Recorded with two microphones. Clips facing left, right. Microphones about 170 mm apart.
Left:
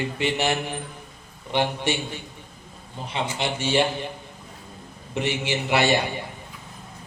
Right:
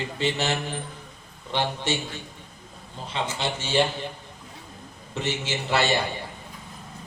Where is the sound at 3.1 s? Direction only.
15° left (ahead or behind).